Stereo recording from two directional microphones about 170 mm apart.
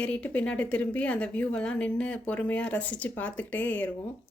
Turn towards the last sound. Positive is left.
turn(degrees=10)  # may be behind; listen again after turning